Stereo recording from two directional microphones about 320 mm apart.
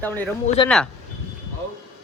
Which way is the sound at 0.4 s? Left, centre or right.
Centre.